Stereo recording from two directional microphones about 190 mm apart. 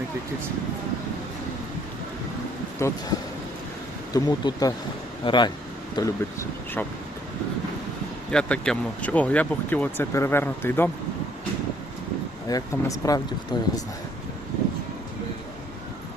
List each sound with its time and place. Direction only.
2.8 s speech: 15° left (ahead or behind)
4.1 s speech: 20° left (ahead or behind)
8.3 s speech: 5° left (ahead or behind)
12.5 s speech: 20° left (ahead or behind)